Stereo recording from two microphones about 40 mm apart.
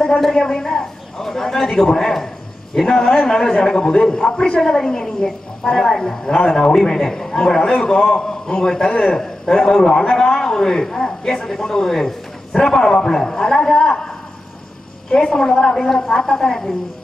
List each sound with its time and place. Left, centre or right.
0.4 s a man's voice: centre